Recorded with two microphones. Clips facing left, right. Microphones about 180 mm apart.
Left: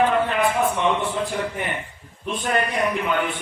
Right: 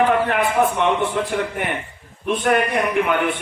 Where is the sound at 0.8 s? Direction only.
60° right (ahead or behind).